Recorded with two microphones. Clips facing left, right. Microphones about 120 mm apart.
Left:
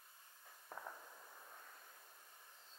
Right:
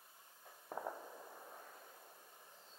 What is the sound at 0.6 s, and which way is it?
Fireworks, 30° right (ahead or behind).